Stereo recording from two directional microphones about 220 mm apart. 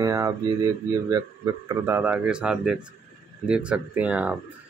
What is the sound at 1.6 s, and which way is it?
Speech, 10° right (ahead or behind).